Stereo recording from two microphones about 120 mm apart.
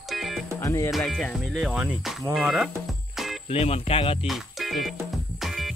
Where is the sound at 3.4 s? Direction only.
55° left (ahead or behind).